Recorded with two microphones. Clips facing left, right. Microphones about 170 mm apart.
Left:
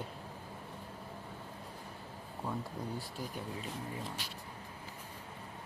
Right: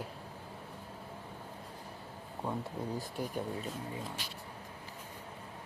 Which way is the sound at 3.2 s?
60° right (ahead or behind).